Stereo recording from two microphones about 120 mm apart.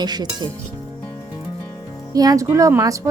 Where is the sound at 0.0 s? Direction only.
35° right (ahead or behind).